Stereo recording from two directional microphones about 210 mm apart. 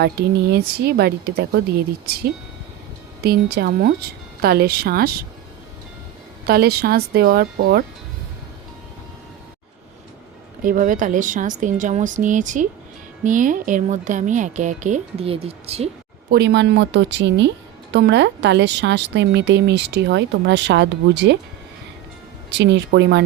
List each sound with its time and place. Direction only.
0.0 s speech: 50° right (ahead or behind)
3.2 s speech: 50° right (ahead or behind)
6.4 s speech: 50° right (ahead or behind)
10.6 s speech: 40° right (ahead or behind)
16.3 s a woman's voice: 55° right (ahead or behind)
22.5 s a woman's voice: 55° right (ahead or behind)